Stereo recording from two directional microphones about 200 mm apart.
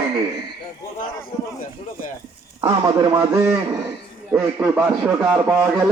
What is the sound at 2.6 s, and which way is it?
A man's voice, 20° right (ahead or behind).